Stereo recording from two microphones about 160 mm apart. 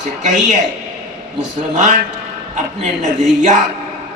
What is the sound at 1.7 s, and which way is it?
A man's voice, 50° right (ahead or behind).